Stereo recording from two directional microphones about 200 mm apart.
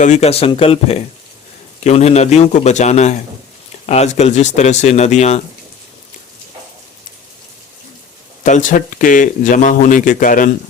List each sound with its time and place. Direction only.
0.0 s a man's voice: 35° left (ahead or behind)
8.4 s a man's voice: 40° left (ahead or behind)